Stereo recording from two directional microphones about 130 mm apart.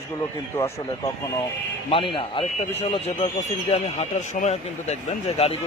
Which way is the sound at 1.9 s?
40° left (ahead or behind).